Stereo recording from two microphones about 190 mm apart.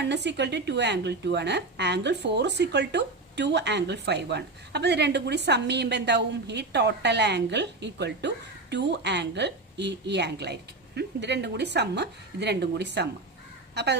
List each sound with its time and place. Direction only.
0.0 s a woman's voice: 65° right (ahead or behind)